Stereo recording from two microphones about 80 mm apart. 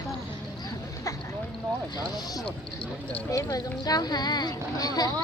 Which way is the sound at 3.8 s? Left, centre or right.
Left.